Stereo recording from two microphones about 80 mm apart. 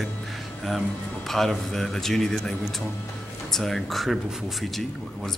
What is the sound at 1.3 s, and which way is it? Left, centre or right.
Speech, centre.